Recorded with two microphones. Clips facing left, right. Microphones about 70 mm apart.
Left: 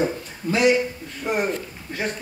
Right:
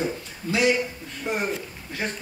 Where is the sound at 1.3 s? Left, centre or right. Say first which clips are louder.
Left 4 dB; centre.